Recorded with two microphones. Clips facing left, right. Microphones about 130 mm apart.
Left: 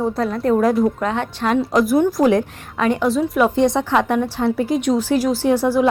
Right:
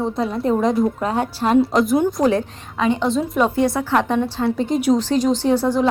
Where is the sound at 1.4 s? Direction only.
25° right (ahead or behind).